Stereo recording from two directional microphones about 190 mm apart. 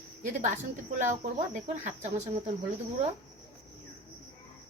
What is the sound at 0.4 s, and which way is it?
Cricket, 40° right (ahead or behind).